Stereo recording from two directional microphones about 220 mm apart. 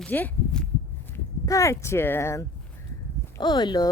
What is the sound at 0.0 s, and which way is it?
Walk, 10° left (ahead or behind).